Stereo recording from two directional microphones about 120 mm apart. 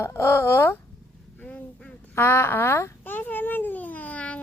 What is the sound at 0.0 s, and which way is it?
Speech, 20° left (ahead or behind).